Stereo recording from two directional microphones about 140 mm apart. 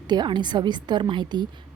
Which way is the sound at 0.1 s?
30° right (ahead or behind).